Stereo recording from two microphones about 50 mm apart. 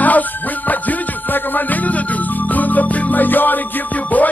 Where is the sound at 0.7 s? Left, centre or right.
Left.